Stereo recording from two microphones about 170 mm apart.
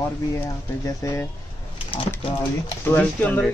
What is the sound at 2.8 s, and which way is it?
Speech, 10° left (ahead or behind).